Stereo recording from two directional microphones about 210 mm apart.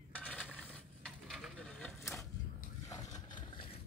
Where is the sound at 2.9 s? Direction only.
20° left (ahead or behind).